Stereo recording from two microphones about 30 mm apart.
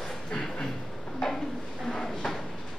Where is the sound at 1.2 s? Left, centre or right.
Centre.